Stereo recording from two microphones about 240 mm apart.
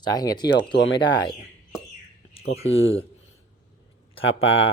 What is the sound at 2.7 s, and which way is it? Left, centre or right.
Speech, left.